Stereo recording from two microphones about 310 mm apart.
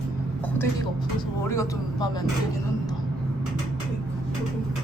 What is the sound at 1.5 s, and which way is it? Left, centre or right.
Speech, centre.